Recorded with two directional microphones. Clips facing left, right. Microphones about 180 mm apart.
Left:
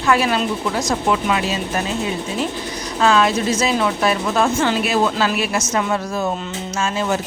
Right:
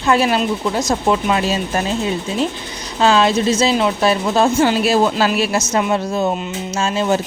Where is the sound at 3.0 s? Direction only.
30° right (ahead or behind).